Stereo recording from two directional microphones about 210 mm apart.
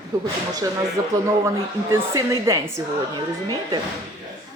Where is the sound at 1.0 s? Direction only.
15° right (ahead or behind).